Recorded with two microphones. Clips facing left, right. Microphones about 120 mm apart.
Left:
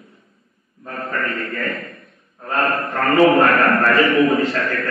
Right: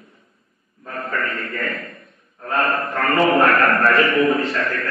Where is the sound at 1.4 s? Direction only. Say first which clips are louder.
Left 1 dB; centre (ahead or behind).